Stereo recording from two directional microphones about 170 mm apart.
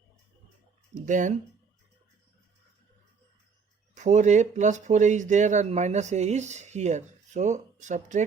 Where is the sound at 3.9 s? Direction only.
45° right (ahead or behind).